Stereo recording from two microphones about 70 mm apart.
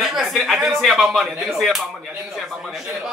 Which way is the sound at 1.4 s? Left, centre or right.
Centre.